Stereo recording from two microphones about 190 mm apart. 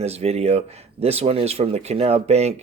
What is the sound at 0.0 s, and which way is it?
Speech, 35° right (ahead or behind).